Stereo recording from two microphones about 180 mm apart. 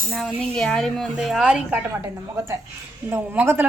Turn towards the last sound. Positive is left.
turn(degrees=-10)  # may be behind; listen again after turning